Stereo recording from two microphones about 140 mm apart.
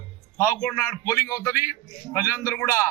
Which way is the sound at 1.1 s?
20° left (ahead or behind).